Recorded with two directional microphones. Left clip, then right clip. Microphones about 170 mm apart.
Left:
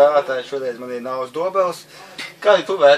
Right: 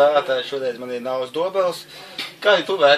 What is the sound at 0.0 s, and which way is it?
A man's voice, 10° right (ahead or behind).